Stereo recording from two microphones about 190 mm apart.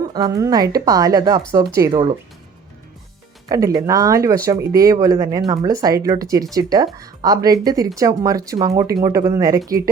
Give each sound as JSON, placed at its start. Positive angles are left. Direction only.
{"t": 0.1, "sound": "a woman's voice", "side_deg": -20}
{"t": 3.5, "sound": "a woman's voice", "side_deg": -20}